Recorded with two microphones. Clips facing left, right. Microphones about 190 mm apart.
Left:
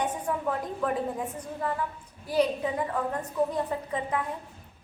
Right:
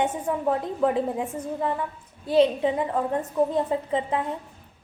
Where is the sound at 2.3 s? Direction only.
25° right (ahead or behind).